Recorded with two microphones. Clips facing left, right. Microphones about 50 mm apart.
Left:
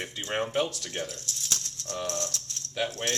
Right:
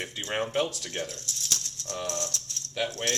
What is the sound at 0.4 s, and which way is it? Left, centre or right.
Speech, centre.